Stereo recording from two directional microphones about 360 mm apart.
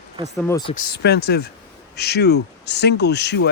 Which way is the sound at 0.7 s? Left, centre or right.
Left.